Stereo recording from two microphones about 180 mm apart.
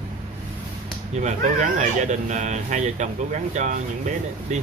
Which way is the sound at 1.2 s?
45° right (ahead or behind).